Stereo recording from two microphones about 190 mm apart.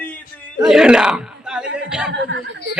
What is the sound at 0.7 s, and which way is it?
Speech, 5° right (ahead or behind).